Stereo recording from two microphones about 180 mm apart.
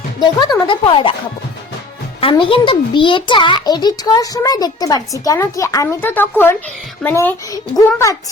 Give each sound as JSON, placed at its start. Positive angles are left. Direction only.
{"t": 0.3, "sound": "a child's voice", "side_deg": 20}
{"t": 2.2, "sound": "a child's voice", "side_deg": 30}